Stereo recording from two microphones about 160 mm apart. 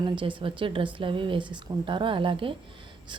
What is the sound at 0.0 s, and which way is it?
A woman's voice, 30° right (ahead or behind).